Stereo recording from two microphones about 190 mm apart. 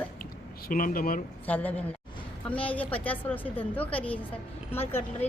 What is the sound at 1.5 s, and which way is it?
A woman's voice, 10° left (ahead or behind).